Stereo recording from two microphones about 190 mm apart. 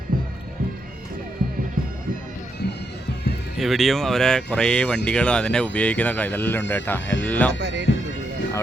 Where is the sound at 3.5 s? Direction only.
Centre (ahead or behind).